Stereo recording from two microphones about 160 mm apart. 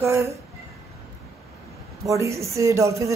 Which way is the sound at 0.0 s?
15° right (ahead or behind).